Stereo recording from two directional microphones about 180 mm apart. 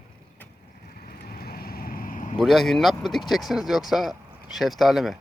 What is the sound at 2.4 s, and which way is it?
Speech, centre (ahead or behind).